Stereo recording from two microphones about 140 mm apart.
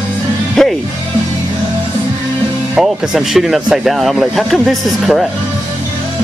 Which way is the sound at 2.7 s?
Centre (ahead or behind).